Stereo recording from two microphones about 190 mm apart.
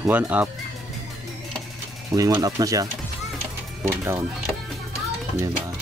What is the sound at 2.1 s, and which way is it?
Speech, 20° right (ahead or behind).